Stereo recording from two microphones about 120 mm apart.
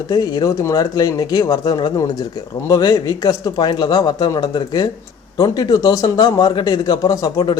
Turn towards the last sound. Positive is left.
turn(degrees=30)  # may be behind; listen again after turning